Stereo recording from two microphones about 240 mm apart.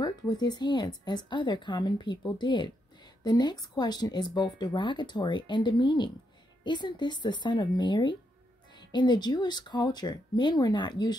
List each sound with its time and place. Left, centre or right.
0.0 s speech: centre